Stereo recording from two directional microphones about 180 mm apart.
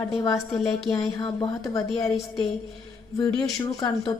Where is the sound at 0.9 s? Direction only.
25° left (ahead or behind).